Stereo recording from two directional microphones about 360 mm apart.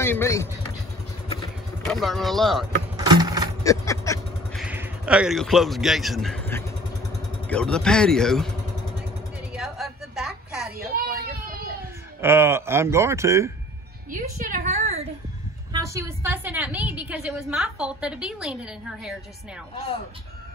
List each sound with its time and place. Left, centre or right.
0.0 s speech: centre
1.9 s a woman's voice: centre
3.0 s a sound: centre
3.6 s vehicle: centre
4.6 s a woman's voice: centre
9.5 s a sound: centre
11.1 s vehicle: right
12.2 s speech: centre
14.1 s a woman's voice: right
15.7 s a woman's voice: centre